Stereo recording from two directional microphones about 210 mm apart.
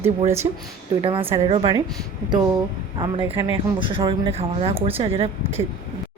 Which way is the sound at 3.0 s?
20° right (ahead or behind).